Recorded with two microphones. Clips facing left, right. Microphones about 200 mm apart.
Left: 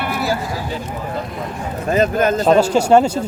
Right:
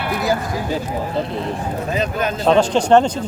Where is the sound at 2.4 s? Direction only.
10° left (ahead or behind).